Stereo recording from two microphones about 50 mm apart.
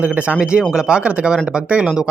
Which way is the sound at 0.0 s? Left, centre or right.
Right.